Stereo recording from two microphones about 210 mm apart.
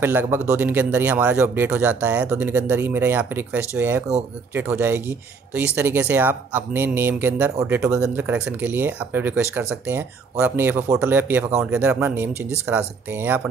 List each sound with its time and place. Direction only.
0.0 s speech: 10° right (ahead or behind)